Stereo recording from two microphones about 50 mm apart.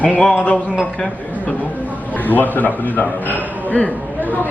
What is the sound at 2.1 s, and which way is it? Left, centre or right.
A man's voice, left.